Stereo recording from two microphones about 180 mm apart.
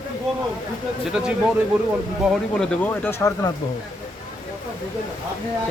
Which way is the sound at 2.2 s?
5° left (ahead or behind).